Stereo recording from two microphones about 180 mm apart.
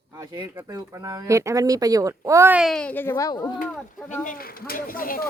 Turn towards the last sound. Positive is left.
turn(degrees=50)  # may be behind; listen again after turning